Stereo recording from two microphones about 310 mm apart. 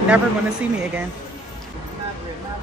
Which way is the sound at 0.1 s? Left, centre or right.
Centre.